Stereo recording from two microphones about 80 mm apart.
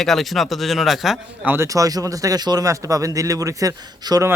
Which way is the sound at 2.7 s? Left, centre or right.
Right.